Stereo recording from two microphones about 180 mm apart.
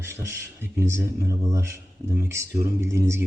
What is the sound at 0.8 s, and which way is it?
Speech, 15° right (ahead or behind).